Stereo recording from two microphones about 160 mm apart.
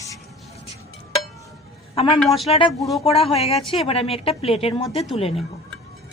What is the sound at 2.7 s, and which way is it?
Speech, centre (ahead or behind).